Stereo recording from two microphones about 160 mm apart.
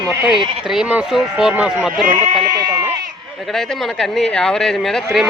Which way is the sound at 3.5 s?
Centre (ahead or behind).